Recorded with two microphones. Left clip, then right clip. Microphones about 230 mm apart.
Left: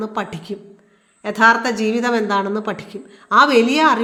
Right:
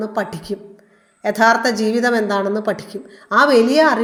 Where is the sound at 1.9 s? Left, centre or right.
Centre.